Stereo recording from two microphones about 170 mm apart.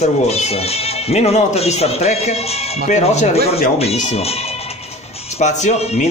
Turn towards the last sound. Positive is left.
turn(degrees=40)  # may be behind; listen again after turning